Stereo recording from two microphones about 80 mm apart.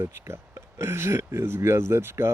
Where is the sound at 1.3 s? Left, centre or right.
Right.